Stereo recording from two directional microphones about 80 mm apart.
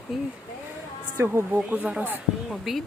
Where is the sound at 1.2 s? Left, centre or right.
Right.